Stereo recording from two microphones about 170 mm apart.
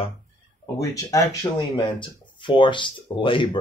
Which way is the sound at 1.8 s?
30° left (ahead or behind).